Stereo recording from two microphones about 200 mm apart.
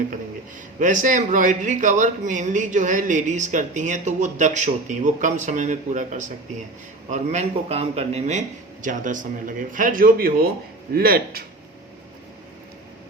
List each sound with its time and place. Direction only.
0.8 s a man's voice: 40° right (ahead or behind)